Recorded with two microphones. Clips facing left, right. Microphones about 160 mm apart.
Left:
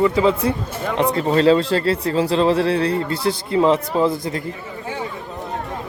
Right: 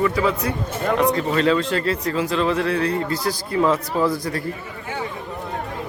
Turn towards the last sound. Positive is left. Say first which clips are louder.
# left 2 dB
turn(degrees=20)  # may be behind; listen again after turning